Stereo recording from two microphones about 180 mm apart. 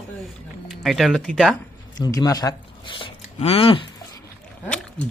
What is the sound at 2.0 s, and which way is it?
Speech, 20° left (ahead or behind).